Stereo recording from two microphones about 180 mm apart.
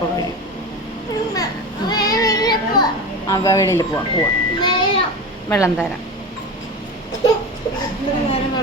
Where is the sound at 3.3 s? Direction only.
20° left (ahead or behind).